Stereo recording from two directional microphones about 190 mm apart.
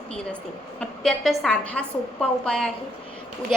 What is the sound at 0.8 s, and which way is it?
A woman's voice, centre (ahead or behind).